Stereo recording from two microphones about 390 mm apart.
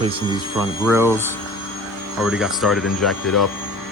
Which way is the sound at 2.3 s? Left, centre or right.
Centre.